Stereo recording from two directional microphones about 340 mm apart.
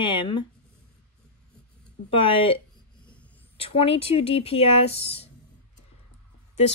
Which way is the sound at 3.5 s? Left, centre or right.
Centre.